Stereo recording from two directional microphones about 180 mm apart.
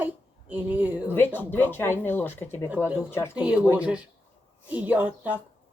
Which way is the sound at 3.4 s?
5° right (ahead or behind).